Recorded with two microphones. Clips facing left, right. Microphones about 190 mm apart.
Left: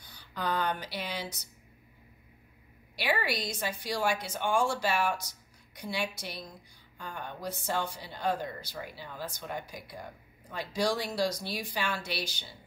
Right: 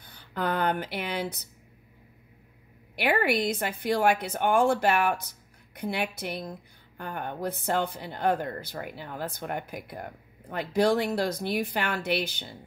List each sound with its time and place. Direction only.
0.0 s speech: 55° right (ahead or behind)
3.0 s speech: 60° right (ahead or behind)